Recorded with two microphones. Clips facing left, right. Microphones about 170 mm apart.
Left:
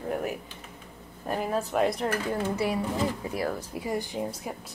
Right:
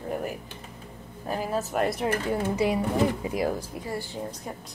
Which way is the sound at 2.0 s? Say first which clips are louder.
Right 2 dB; 20° right (ahead or behind).